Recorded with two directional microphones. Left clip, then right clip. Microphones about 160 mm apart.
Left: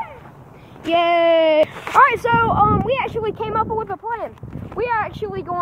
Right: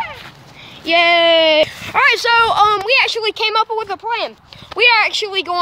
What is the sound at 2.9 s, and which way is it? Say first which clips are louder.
Speech: right 6 dB; 15° right (ahead or behind).